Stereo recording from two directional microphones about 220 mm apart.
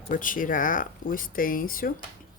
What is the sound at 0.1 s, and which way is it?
Speech, 35° left (ahead or behind).